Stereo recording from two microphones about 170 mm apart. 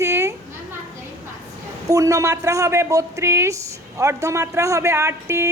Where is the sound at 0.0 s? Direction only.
15° right (ahead or behind).